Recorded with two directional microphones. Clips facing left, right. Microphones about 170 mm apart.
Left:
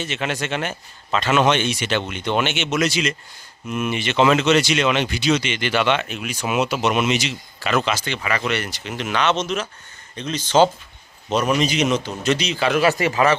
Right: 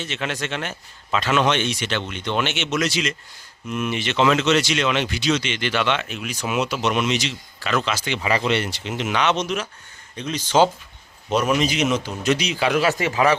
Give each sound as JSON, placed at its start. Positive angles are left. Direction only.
{"t": 0.0, "sound": "speech", "side_deg": 5}
{"t": 7.9, "sound": "a man's voice", "side_deg": -15}
{"t": 8.2, "sound": "a man's voice", "side_deg": -25}
{"t": 12.7, "sound": "speech", "side_deg": 5}